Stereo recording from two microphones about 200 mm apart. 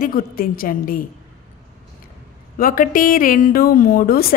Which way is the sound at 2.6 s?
45° left (ahead or behind).